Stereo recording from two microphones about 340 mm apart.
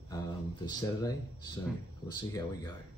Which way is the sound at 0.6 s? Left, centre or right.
Centre.